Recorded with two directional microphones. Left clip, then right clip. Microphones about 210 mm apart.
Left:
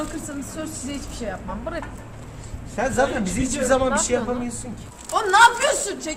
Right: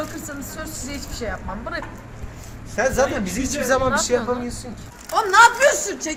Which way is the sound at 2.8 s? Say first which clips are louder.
Right 4 dB; 45° right (ahead or behind).